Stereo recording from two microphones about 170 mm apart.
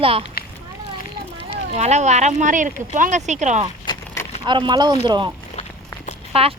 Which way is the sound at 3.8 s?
15° left (ahead or behind).